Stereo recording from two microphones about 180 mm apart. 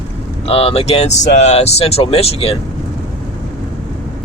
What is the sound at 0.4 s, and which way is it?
Speech, 35° left (ahead or behind).